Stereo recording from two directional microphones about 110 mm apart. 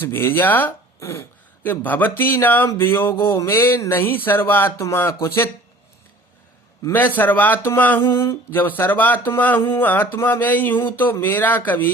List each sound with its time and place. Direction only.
0.0 s speech: 20° left (ahead or behind)
7.2 s speech: 15° left (ahead or behind)